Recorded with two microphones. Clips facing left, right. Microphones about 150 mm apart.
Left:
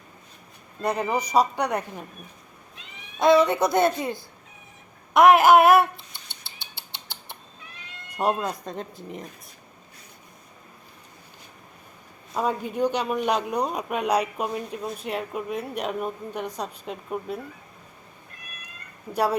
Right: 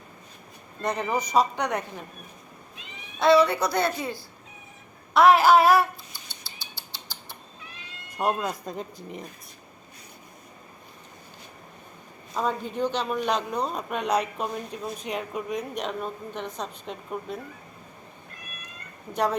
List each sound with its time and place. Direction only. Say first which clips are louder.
0.8 s speech: left 2 dB; 10° left (ahead or behind)
3.2 s speech: left 1 dB; 20° left (ahead or behind)
8.1 s speech: left 2 dB; 5° left (ahead or behind)
8.4 s speech: left 1 dB; 5° right (ahead or behind)
12.3 s speech: left 2 dB; 10° left (ahead or behind)
19.1 s speech: left 2 dB; 10° left (ahead or behind)